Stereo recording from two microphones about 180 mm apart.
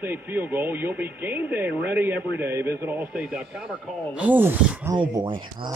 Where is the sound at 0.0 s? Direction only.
10° right (ahead or behind).